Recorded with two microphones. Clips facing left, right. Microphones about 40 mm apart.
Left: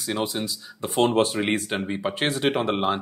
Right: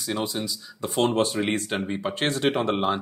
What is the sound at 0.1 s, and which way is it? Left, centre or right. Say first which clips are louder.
Speech: left 1 dB; centre.